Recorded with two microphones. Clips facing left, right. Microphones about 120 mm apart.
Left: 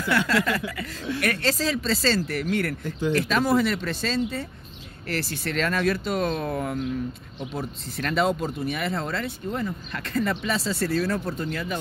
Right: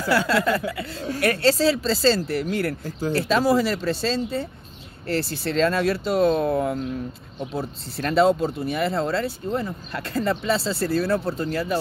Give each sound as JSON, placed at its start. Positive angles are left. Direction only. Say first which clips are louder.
{"t": 0.0, "sound": "speech", "louder": "right 3 dB", "side_deg": -35}
{"t": 1.0, "sound": "speech", "louder": "right 5 dB", "side_deg": -40}